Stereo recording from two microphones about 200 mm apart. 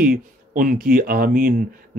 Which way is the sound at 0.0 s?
45° right (ahead or behind).